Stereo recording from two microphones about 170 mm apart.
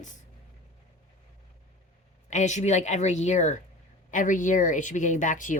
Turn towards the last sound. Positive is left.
turn(degrees=50)  # may be behind; listen again after turning